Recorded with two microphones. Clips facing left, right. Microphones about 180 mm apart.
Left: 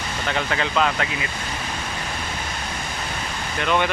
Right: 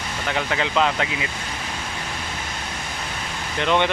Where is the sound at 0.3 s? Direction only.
15° right (ahead or behind).